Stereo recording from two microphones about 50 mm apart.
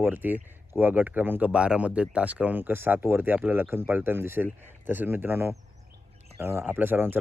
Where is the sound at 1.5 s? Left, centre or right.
Right.